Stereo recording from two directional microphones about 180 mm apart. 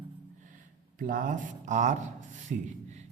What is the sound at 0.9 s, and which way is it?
A man's voice, 50° right (ahead or behind).